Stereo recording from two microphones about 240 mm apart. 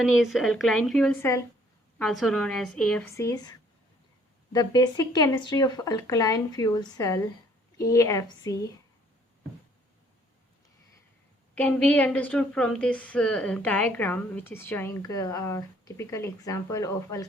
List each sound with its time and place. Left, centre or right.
0.2 s a woman's voice: centre
4.5 s a woman's voice: centre
11.5 s a woman's voice: centre